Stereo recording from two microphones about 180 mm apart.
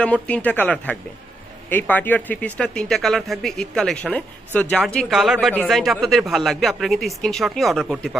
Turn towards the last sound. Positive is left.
turn(degrees=0)  # may be behind; listen again after turning